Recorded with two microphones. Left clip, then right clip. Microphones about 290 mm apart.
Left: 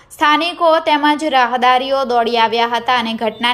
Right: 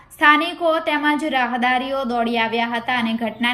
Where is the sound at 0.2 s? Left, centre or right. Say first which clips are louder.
Left 2 dB; centre.